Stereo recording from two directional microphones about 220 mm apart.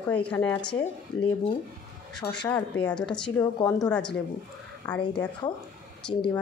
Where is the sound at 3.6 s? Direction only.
15° left (ahead or behind).